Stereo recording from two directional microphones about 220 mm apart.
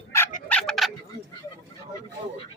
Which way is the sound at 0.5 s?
5° left (ahead or behind).